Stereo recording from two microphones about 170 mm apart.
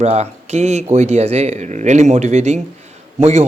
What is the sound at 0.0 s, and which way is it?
A man's voice, 40° right (ahead or behind).